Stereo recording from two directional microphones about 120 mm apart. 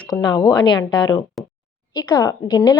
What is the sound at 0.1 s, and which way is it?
A woman's voice, 35° left (ahead or behind).